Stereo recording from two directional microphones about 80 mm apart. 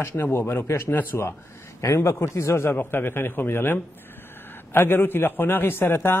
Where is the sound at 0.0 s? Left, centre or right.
Left.